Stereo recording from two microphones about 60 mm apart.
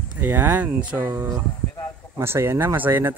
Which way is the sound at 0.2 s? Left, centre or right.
Right.